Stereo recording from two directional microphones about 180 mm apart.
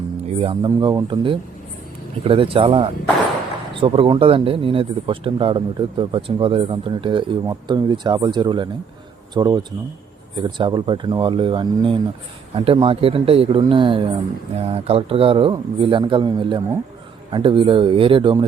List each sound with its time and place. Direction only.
0.3 s speech: 30° right (ahead or behind)